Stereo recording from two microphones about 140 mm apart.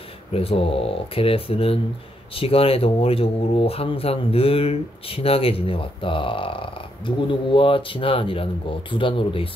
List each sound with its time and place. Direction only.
0.3 s speech: 45° left (ahead or behind)